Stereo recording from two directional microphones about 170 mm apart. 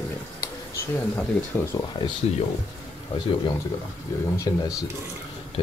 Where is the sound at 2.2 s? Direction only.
35° left (ahead or behind).